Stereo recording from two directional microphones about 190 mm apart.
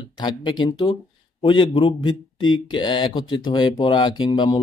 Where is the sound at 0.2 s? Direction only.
25° left (ahead or behind).